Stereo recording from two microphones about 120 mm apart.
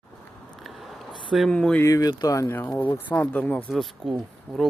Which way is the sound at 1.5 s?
10° left (ahead or behind).